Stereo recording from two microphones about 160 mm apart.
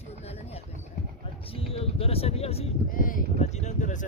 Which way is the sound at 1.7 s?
40° left (ahead or behind).